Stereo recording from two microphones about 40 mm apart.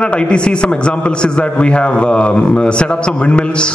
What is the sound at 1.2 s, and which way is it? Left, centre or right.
A man's voice, left.